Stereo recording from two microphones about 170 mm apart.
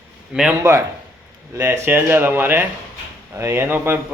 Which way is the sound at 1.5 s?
15° right (ahead or behind).